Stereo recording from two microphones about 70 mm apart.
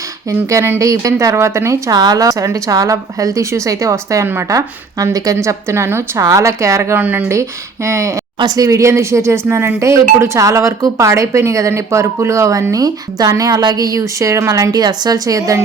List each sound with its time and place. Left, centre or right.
0.3 s speech: right
1.9 s speech: right
6.9 s speech: right
7.9 s speech: right
8.4 s speech: right